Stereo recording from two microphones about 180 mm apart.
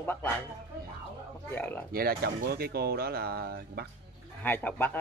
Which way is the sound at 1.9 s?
55° right (ahead or behind).